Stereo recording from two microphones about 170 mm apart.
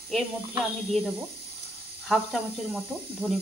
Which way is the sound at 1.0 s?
10° right (ahead or behind).